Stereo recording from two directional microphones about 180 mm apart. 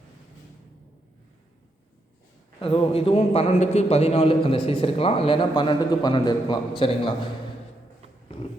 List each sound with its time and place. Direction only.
2.6 s a man's voice: 30° left (ahead or behind)